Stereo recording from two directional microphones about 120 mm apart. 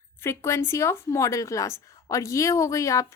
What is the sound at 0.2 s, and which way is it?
A woman's voice, 20° left (ahead or behind).